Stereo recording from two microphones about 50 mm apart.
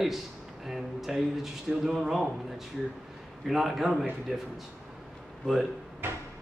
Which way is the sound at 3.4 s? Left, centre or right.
Centre.